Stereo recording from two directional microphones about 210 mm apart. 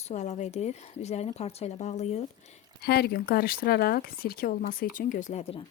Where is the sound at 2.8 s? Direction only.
50° left (ahead or behind); by 5.6 s 30° left (ahead or behind).